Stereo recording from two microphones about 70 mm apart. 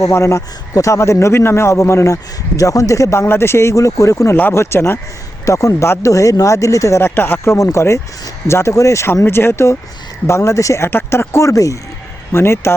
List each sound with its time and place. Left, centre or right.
0.0 s a man's voice: left
5.5 s a man's voice: left
7.0 s a man's voice: left
10.8 s speech: left
12.3 s speech: left